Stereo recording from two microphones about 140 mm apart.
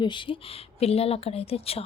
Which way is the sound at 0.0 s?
35° left (ahead or behind).